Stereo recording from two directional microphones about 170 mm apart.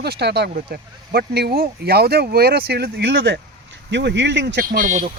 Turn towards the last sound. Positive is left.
turn(degrees=-50)  # may be behind; listen again after turning